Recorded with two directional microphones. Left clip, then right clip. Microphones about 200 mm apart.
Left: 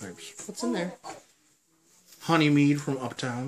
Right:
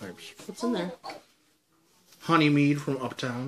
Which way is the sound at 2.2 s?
Centre (ahead or behind).